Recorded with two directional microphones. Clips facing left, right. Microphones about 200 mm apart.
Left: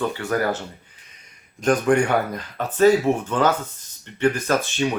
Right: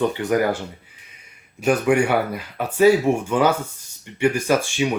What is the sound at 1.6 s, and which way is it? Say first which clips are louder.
Speech: even; 10° right (ahead or behind).